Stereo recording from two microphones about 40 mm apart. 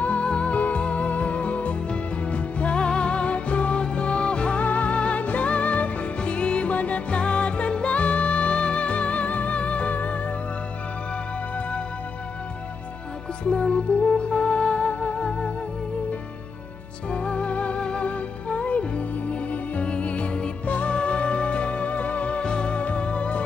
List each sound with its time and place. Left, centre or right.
0.0 s music: left
13.4 s music: left
17.1 s music: left